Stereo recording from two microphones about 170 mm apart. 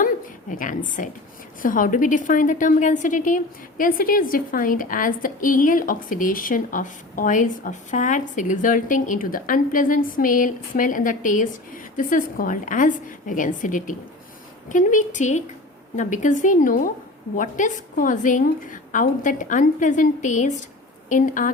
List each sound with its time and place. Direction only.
0.5 s a woman's voice: 50° left (ahead or behind)